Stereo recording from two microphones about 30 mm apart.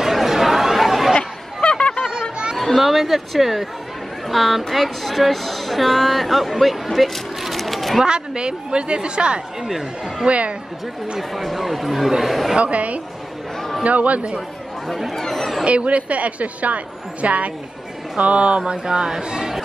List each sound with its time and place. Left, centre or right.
0.0 s chatter: centre
1.1 s a sound: left
2.5 s a woman's voice: centre
7.0 s a sound: centre
8.0 s a woman's voice: right
10.2 s a woman's voice: right
11.1 s a woman's voice: centre
12.5 s a woman's voice: right
15.1 s speech: centre
15.6 s a woman's voice: right
18.6 s speech: right